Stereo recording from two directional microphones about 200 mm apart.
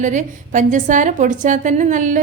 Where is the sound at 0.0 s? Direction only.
40° right (ahead or behind).